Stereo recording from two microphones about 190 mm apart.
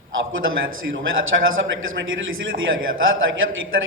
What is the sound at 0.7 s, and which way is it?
A man's voice, 90° right.